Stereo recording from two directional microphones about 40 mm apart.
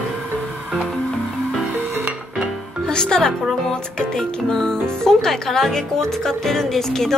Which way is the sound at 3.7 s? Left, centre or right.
Centre.